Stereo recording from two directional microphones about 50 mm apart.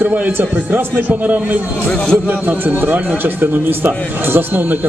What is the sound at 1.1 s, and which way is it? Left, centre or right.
A man's voice, right.